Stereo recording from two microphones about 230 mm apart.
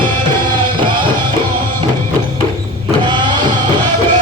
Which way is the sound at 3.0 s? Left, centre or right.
Centre.